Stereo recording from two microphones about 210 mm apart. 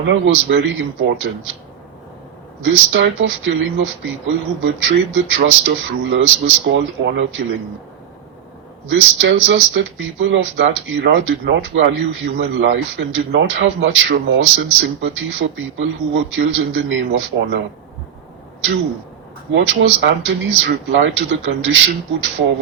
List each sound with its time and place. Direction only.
0.0 s speech: 60° right (ahead or behind)
2.6 s speech: 60° right (ahead or behind)
8.9 s speech: 60° right (ahead or behind)
19.5 s speech: 60° right (ahead or behind)